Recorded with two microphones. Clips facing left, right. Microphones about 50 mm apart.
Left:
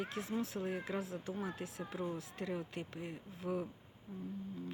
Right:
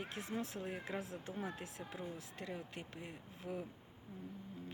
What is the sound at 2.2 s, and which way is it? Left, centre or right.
Speech, centre.